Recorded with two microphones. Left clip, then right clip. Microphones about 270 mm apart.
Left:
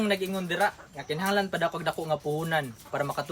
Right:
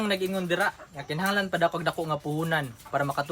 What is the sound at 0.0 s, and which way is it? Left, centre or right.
Speech, centre.